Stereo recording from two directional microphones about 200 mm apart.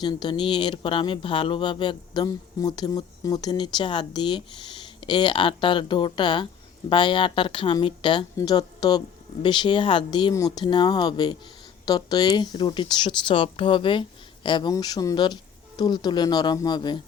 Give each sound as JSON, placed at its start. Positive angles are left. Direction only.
{"t": 0.0, "sound": "speech", "side_deg": 20}